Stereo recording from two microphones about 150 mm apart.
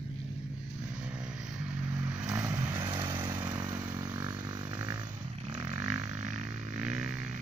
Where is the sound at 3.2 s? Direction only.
15° right (ahead or behind).